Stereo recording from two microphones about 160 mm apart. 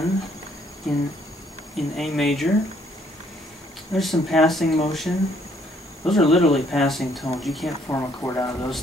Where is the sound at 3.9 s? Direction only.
Centre (ahead or behind).